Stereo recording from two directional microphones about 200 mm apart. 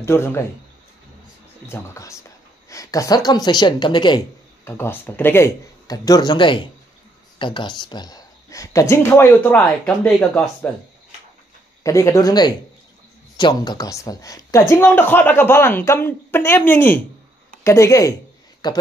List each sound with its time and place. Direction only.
0.0 s a woman's voice: 15° left (ahead or behind)
1.7 s a woman's voice: 15° left (ahead or behind)
4.6 s a woman's voice: 10° left (ahead or behind)
11.8 s a woman's voice: 15° left (ahead or behind)